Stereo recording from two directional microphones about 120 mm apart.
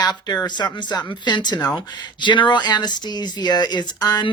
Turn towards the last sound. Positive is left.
turn(degrees=35)  # may be behind; listen again after turning